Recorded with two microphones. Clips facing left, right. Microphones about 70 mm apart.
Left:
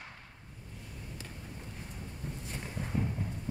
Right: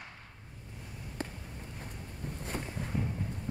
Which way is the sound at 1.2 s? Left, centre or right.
Right.